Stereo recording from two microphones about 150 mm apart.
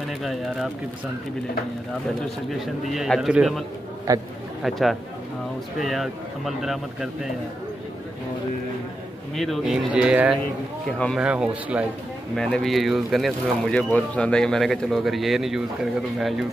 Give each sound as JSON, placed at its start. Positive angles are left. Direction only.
{"t": 0.2, "sound": "speech", "side_deg": 0}
{"t": 2.5, "sound": "speech", "side_deg": 0}
{"t": 4.1, "sound": "a man's voice", "side_deg": -20}
{"t": 4.6, "sound": "speech", "side_deg": 0}
{"t": 9.3, "sound": "speech", "side_deg": 0}
{"t": 10.9, "sound": "speech", "side_deg": 5}
{"t": 11.1, "sound": "speech", "side_deg": -5}
{"t": 12.4, "sound": "speech", "side_deg": 5}